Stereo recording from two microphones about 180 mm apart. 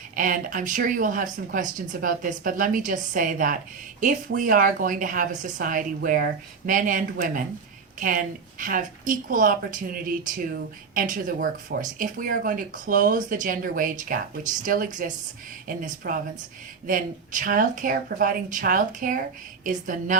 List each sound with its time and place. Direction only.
0.2 s speech: 50° right (ahead or behind)